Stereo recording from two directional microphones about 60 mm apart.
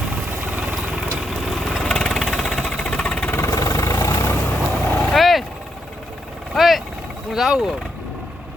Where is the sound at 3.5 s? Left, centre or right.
Left.